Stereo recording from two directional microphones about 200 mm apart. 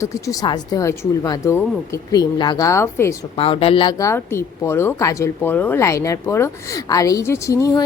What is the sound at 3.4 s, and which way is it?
Speech, 30° left (ahead or behind).